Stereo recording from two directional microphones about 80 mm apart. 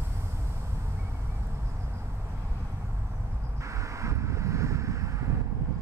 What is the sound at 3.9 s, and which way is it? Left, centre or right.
Wind noise, right.